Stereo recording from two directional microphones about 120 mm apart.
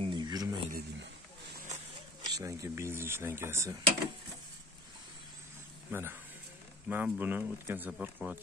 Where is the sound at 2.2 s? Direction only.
25° right (ahead or behind).